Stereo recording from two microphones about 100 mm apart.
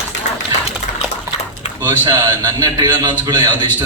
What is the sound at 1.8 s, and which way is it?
A man's voice, 45° right (ahead or behind).